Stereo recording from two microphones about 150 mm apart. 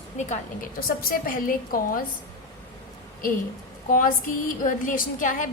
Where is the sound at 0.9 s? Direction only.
70° left (ahead or behind).